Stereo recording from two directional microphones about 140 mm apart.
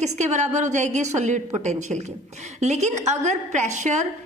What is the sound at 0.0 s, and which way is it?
A woman's voice, 55° right (ahead or behind).